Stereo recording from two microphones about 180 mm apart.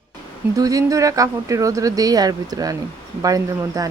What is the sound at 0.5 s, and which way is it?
Speech, 20° right (ahead or behind).